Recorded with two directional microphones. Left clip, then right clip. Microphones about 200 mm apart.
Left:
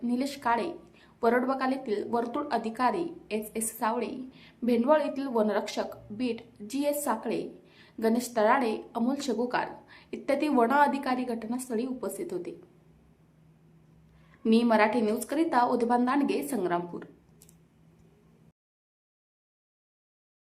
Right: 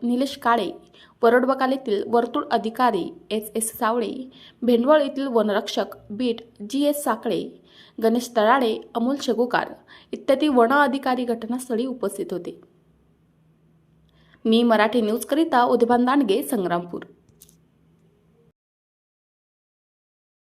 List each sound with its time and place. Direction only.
0.0 s a woman's voice: 30° right (ahead or behind)
14.4 s a woman's voice: 30° right (ahead or behind)